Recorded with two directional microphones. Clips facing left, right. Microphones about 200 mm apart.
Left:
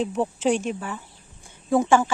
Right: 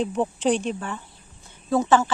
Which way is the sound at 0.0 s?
5° left (ahead or behind).